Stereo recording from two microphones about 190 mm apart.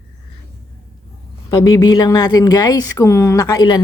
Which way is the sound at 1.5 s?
20° left (ahead or behind).